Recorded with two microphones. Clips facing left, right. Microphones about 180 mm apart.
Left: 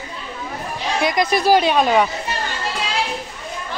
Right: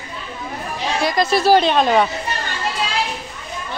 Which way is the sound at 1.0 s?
20° left (ahead or behind).